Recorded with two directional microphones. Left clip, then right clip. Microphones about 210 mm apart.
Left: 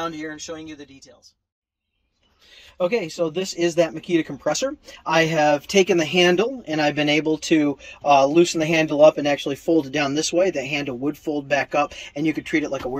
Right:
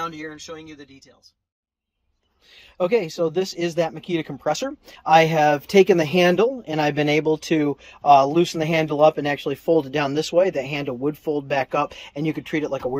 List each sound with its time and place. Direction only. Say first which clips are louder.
0.0 s speech: left 1 dB; 20° right (ahead or behind)
2.5 s speech: right 2 dB; 20° right (ahead or behind)